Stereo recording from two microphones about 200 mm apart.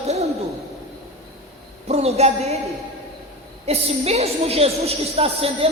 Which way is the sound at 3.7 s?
30° right (ahead or behind).